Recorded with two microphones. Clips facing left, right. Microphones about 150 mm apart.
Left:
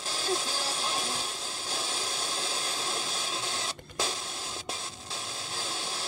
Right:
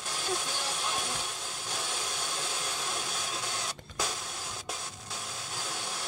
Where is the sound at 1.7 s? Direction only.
30° left (ahead or behind).